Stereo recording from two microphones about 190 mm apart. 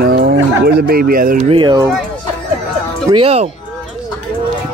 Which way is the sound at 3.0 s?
30° right (ahead or behind).